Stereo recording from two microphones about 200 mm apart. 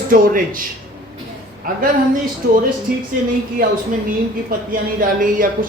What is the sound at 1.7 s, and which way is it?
Speech, 45° right (ahead or behind).